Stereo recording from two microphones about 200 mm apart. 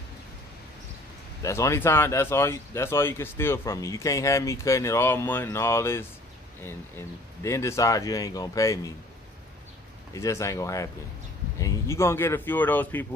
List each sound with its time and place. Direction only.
1.4 s speech: 15° left (ahead or behind)
10.1 s speech: 15° left (ahead or behind)